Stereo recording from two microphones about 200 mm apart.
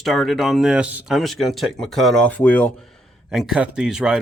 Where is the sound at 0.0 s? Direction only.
Centre (ahead or behind).